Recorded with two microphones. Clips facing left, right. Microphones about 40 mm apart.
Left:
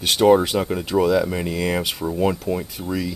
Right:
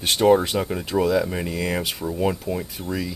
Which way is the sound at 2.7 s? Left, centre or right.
Centre.